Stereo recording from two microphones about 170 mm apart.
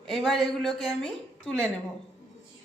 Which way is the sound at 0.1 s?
Centre (ahead or behind).